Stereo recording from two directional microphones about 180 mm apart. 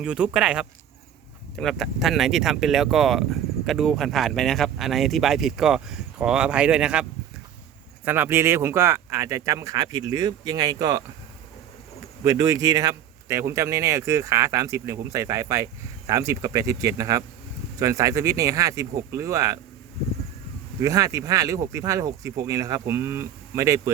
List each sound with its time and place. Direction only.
0.0 s speech: 5° right (ahead or behind)
12.2 s speech: 20° right (ahead or behind)
20.8 s speech: 20° right (ahead or behind)